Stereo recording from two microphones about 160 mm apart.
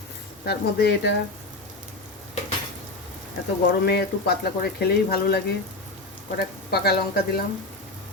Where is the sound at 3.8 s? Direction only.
90° left.